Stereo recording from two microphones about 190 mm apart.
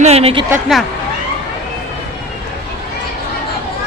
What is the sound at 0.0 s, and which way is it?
Speech, 35° right (ahead or behind).